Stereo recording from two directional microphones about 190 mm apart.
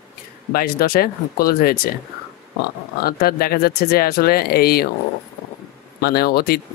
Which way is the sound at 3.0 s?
55° left (ahead or behind).